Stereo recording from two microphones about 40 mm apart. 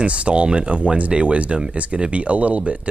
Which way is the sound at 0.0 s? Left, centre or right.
Right.